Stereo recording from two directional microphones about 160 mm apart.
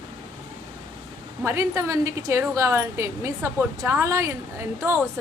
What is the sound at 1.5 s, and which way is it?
A woman's voice, 20° right (ahead or behind).